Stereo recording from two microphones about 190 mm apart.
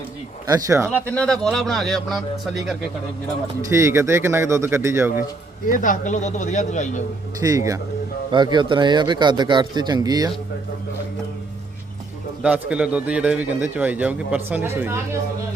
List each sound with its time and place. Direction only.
0.4 s speech: 15° right (ahead or behind)
0.9 s a man's voice: 5° left (ahead or behind)
3.7 s speech: 15° right (ahead or behind)
5.6 s speech: 45° left (ahead or behind)
7.4 s a man's voice: 20° right (ahead or behind)
12.4 s speech: 5° right (ahead or behind)